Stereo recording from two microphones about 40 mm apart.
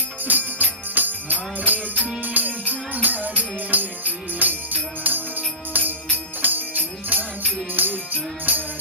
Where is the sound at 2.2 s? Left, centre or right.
Right.